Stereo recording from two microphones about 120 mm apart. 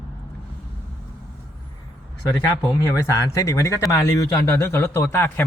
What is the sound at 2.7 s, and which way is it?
A man's voice, 25° left (ahead or behind).